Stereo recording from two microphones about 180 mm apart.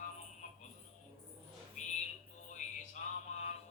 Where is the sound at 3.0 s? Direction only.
40° left (ahead or behind).